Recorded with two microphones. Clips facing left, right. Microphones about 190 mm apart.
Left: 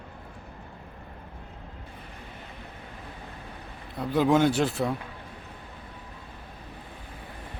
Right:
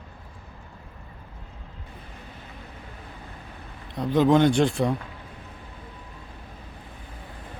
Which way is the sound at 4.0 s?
10° left (ahead or behind).